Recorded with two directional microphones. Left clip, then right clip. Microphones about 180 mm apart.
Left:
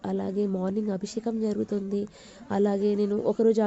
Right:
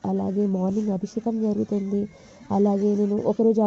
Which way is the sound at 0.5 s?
20° left (ahead or behind).